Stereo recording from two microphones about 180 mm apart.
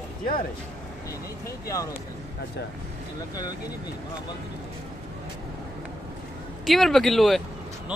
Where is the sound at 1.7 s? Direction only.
20° left (ahead or behind).